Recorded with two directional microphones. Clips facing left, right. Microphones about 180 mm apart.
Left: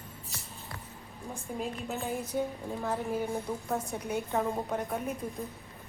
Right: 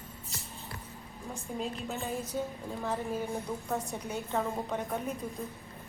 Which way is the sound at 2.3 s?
15° left (ahead or behind).